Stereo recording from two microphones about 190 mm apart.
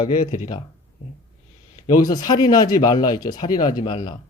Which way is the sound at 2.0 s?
20° left (ahead or behind).